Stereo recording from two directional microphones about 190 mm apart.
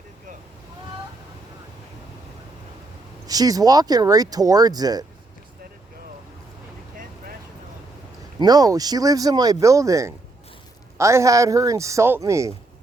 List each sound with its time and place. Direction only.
3.2 s speech: 20° right (ahead or behind)
8.4 s speech: 20° right (ahead or behind)